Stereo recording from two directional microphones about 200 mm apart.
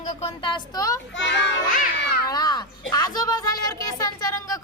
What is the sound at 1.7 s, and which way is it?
Baby cry, 45° left (ahead or behind).